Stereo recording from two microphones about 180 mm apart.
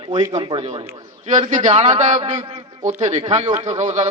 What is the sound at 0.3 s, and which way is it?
A man's voice, 35° right (ahead or behind).